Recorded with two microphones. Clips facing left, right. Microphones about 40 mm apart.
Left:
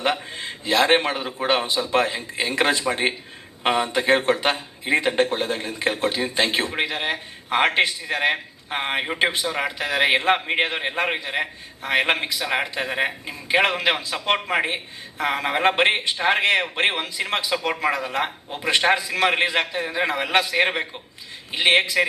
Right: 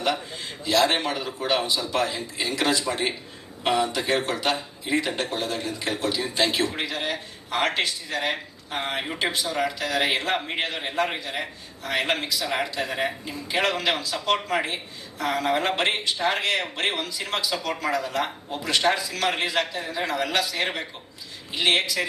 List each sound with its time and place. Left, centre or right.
0.0 s a man's voice: left